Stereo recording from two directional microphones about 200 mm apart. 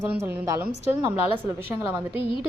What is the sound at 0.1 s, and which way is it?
A woman's voice, 10° right (ahead or behind).